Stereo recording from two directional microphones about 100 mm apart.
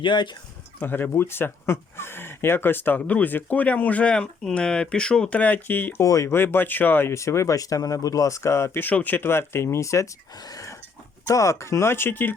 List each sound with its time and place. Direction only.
0.0 s speech: 50° left (ahead or behind)
0.8 s speech: 20° left (ahead or behind)